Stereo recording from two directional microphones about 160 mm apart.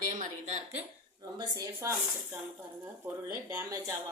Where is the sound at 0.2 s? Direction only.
45° right (ahead or behind).